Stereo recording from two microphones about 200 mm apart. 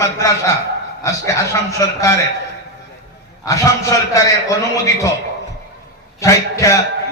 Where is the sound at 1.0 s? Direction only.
15° left (ahead or behind).